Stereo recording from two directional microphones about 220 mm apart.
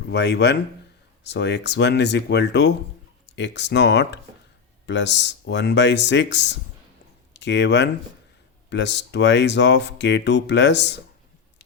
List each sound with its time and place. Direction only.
0.1 s speech: 50° left (ahead or behind)